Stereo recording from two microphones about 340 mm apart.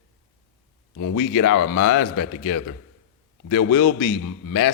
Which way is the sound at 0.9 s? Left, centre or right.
Left.